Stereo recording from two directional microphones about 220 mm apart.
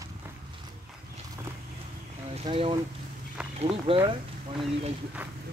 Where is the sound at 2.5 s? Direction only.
25° right (ahead or behind).